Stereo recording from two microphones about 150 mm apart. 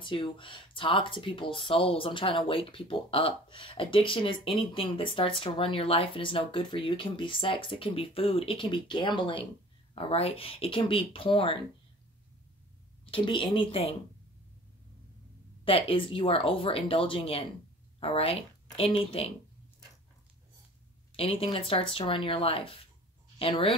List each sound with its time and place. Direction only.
0.0 s speech: 35° left (ahead or behind)
13.0 s speech: 35° left (ahead or behind)
15.6 s speech: 35° left (ahead or behind)
21.2 s speech: 40° left (ahead or behind)